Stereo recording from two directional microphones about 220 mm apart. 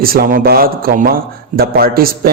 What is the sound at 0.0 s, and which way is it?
A man's voice, 40° right (ahead or behind).